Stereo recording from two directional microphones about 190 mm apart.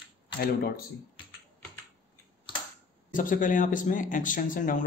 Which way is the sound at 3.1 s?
45° left (ahead or behind).